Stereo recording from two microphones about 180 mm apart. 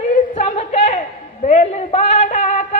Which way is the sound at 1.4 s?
40° left (ahead or behind).